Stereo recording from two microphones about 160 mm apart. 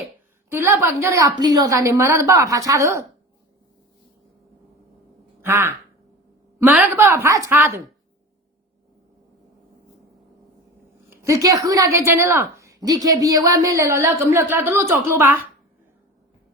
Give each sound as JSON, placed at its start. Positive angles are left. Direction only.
{"t": 0.5, "sound": "a woman's voice", "side_deg": -15}
{"t": 5.5, "sound": "a woman's voice", "side_deg": -15}
{"t": 11.1, "sound": "a woman's voice", "side_deg": -20}